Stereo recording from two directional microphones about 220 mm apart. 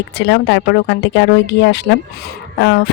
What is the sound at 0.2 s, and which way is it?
A woman's voice, 55° left (ahead or behind).